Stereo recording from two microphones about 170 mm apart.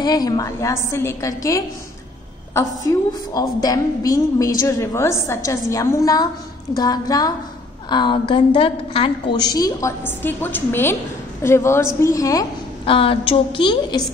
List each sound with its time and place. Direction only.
0.0 s a woman's voice: 25° left (ahead or behind)
2.9 s a woman's voice: 20° left (ahead or behind)
12.8 s a woman's voice: 30° left (ahead or behind)